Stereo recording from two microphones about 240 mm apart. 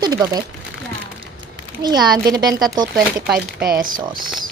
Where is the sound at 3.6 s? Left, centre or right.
Right.